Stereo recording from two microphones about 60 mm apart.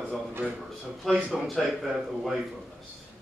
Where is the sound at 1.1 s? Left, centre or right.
Centre.